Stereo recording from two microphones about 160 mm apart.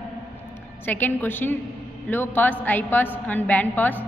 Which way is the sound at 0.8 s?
10° left (ahead or behind).